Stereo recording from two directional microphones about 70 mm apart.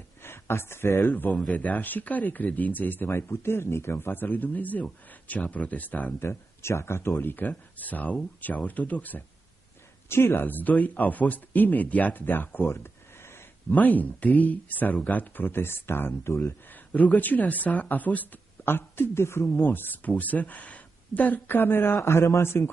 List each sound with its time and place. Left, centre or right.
0.2 s a sound: left
1.0 s speech: left
6.2 s speech: left
10.0 s speech: left
13.7 s speech: left
16.9 s speech: left
22.0 s a man's voice: left